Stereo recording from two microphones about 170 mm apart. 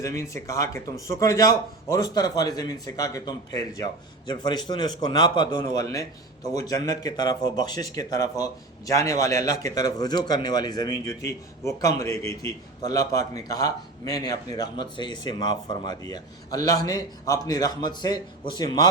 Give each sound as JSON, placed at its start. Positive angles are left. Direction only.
{"t": 0.0, "sound": "a man's voice", "side_deg": 15}